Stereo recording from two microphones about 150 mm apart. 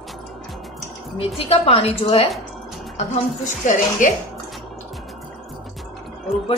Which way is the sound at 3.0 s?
60° left (ahead or behind).